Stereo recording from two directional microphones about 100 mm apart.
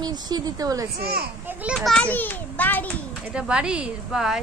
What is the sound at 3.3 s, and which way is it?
A woman's voice, 10° right (ahead or behind).